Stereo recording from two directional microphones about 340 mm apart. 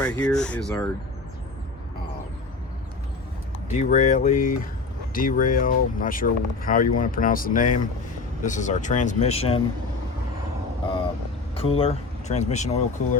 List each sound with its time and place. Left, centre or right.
0.0 s speech: centre
3.7 s speech: left
11.5 s speech: centre